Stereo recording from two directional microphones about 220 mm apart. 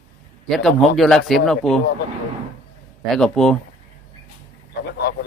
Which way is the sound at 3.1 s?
Centre (ahead or behind).